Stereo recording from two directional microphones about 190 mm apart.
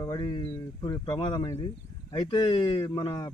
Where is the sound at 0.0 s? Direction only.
20° left (ahead or behind).